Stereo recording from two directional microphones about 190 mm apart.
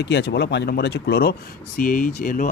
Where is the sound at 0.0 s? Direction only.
60° left (ahead or behind).